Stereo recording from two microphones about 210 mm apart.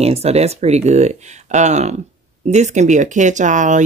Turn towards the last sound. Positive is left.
turn(degrees=-35)  # may be behind; listen again after turning